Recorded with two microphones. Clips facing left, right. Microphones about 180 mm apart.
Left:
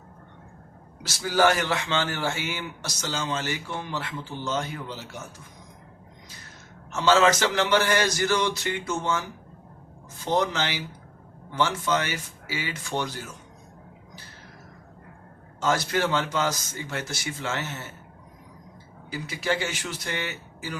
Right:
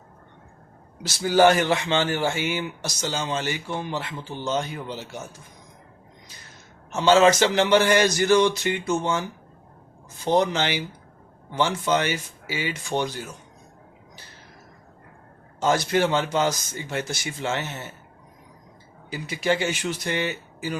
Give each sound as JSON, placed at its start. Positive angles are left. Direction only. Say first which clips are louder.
{"t": 1.0, "sound": "speech", "louder": "right 4 dB", "side_deg": -20}
{"t": 6.9, "sound": "speech", "louder": "right 3 dB", "side_deg": -20}
{"t": 10.3, "sound": "speech", "louder": "right 3 dB", "side_deg": -20}
{"t": 15.6, "sound": "speech", "louder": "right 3 dB", "side_deg": -20}
{"t": 19.1, "sound": "speech", "louder": "right 3 dB", "side_deg": -20}